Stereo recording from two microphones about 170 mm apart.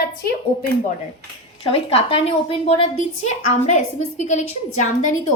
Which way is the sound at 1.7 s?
35° left (ahead or behind).